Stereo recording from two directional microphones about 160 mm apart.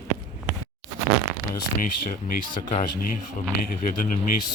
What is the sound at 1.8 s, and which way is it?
Speech, 65° left (ahead or behind).